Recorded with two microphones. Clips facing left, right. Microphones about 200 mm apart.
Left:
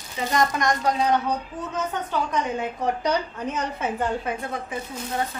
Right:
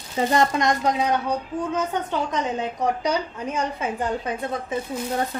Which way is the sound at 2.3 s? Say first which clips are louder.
Even; 20° right (ahead or behind).